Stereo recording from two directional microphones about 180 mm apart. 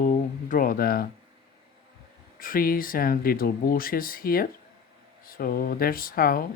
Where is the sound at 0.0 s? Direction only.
45° left (ahead or behind).